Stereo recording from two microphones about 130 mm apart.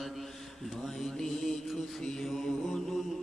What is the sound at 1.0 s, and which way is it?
Mantra, centre (ahead or behind).